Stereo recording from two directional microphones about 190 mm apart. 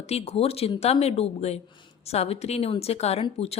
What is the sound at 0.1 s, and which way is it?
Speech, 35° left (ahead or behind).